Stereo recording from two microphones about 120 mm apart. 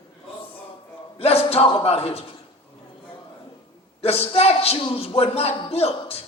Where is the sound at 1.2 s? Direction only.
55° left (ahead or behind).